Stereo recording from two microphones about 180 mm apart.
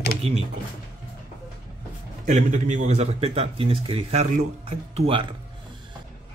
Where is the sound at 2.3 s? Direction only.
45° right (ahead or behind).